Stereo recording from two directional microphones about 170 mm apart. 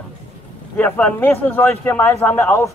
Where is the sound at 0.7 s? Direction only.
10° left (ahead or behind).